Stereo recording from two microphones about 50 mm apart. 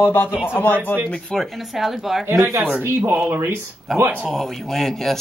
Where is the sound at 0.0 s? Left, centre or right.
Left.